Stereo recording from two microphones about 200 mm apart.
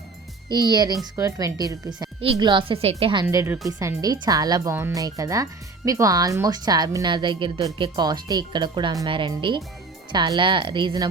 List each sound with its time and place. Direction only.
0.4 s speech: 20° right (ahead or behind)
3.2 s speech: 10° right (ahead or behind)